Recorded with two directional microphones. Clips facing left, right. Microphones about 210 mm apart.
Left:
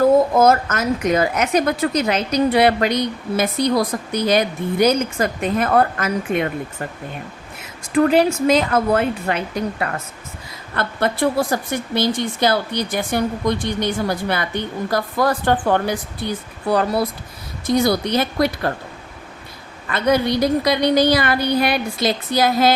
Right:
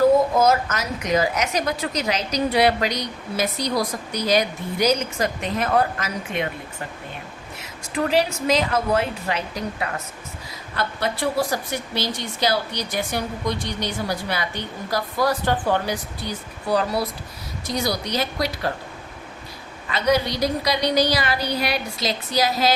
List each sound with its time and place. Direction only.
0.3 s a woman's voice: 55° left (ahead or behind)
7.9 s a woman's voice: 50° left (ahead or behind)
19.9 s a woman's voice: 55° left (ahead or behind)